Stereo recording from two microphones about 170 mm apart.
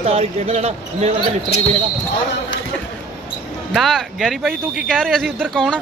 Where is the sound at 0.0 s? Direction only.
35° right (ahead or behind).